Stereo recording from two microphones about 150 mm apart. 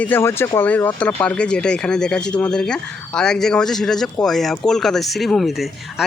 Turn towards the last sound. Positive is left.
turn(degrees=0)  # may be behind; listen again after turning